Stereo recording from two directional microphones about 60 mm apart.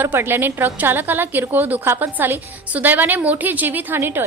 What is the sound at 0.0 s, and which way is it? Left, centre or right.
A woman's voice, right.